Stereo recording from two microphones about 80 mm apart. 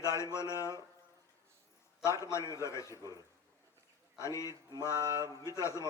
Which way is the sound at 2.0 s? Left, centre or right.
Left.